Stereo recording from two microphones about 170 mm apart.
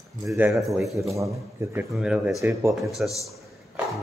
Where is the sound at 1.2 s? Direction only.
15° right (ahead or behind).